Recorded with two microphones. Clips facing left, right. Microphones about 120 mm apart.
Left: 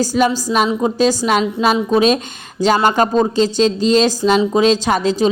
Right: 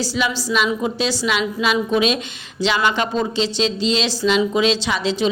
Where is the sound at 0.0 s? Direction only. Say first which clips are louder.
Left 7 dB; 45° left (ahead or behind).